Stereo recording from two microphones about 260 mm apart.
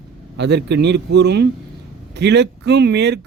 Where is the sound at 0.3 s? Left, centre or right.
Right.